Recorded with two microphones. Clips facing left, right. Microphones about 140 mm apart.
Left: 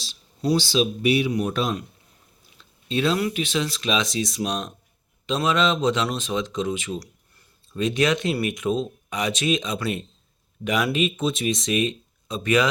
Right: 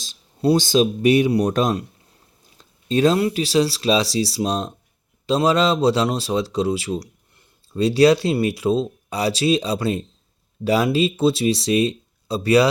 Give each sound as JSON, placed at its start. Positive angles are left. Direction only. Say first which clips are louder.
{"t": 0.5, "sound": "speech", "louder": "right 4 dB", "side_deg": -45}
{"t": 2.6, "sound": "a sound", "louder": "right 7 dB", "side_deg": -40}
{"t": 3.2, "sound": "speech", "louder": "right 6 dB", "side_deg": -30}